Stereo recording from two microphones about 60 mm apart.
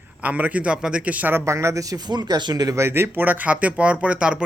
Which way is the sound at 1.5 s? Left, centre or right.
Right.